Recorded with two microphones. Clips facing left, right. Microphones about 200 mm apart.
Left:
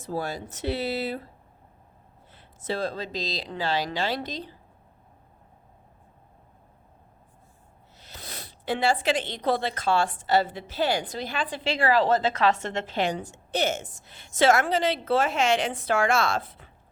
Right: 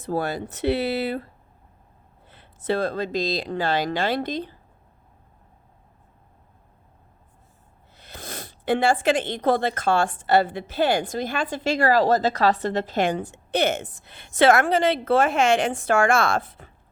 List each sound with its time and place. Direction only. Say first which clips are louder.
0.0 s speech: right 5 dB; 60° right (ahead or behind)
2.3 s speech: right 6 dB; 60° right (ahead or behind)
7.9 s speech: right 5 dB; 55° right (ahead or behind)